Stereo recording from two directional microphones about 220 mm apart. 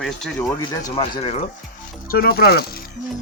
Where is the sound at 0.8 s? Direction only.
25° left (ahead or behind).